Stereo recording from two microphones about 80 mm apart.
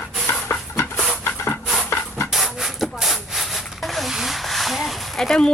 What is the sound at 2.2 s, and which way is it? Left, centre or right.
Rub, centre.